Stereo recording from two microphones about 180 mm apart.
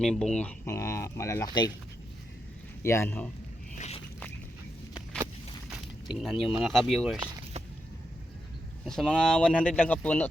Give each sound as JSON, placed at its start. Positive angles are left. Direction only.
{"t": 0.0, "sound": "speech", "side_deg": 5}
{"t": 2.8, "sound": "speech", "side_deg": 15}
{"t": 3.8, "sound": "a sound", "side_deg": 35}
{"t": 6.1, "sound": "speech", "side_deg": 0}
{"t": 8.8, "sound": "speech", "side_deg": 5}